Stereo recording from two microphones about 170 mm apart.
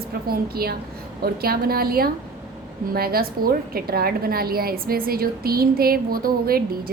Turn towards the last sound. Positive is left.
turn(degrees=-60)  # may be behind; listen again after turning